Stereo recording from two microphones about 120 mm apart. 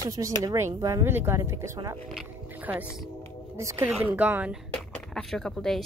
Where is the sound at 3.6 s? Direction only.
25° right (ahead or behind).